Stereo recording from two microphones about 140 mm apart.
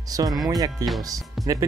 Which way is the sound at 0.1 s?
25° right (ahead or behind).